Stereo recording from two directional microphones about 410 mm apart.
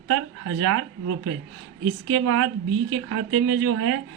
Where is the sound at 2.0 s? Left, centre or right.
Right.